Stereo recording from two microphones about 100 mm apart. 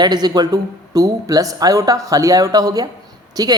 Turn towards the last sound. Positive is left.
turn(degrees=-40)  # may be behind; listen again after turning